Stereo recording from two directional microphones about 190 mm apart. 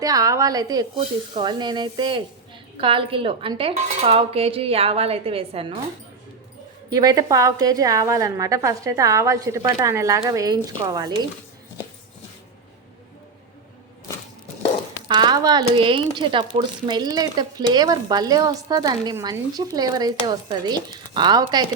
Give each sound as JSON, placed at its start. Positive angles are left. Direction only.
{"t": 0.0, "sound": "a woman's voice", "side_deg": -20}
{"t": 6.9, "sound": "a woman's voice", "side_deg": -20}
{"t": 15.0, "sound": "speech", "side_deg": -25}